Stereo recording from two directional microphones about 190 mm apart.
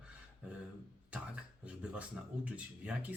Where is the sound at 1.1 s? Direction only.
5° right (ahead or behind).